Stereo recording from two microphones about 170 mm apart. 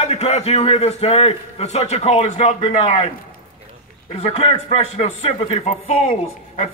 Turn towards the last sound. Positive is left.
turn(degrees=40)  # may be behind; listen again after turning